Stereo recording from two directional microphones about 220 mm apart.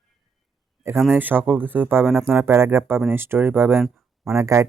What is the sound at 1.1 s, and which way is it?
Speech, 10° right (ahead or behind).